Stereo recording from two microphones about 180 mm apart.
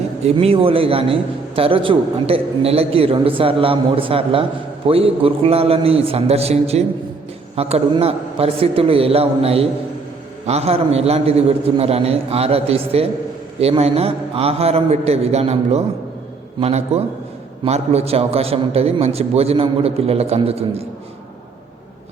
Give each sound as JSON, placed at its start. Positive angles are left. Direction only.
{"t": 0.2, "sound": "a man's voice", "side_deg": -35}